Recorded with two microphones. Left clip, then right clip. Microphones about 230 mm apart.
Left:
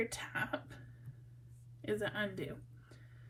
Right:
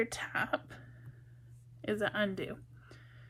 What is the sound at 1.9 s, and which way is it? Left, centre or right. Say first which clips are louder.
Speech: right 4 dB; right.